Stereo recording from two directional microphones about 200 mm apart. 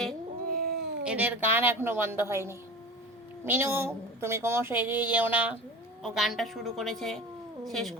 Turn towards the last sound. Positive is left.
turn(degrees=0)  # may be behind; listen again after turning